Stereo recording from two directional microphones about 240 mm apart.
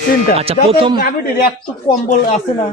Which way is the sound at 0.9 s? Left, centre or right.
Left.